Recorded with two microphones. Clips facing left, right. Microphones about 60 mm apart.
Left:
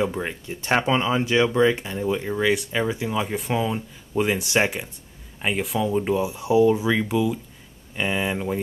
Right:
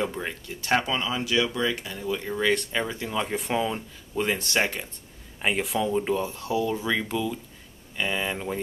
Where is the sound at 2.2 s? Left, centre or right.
Centre.